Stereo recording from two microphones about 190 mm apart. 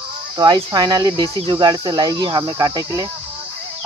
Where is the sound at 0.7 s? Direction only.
20° right (ahead or behind).